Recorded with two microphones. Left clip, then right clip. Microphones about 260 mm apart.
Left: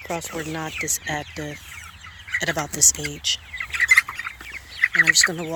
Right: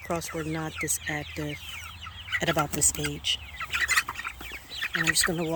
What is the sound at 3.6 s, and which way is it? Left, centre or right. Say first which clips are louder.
Bird: left 10 dB; centre.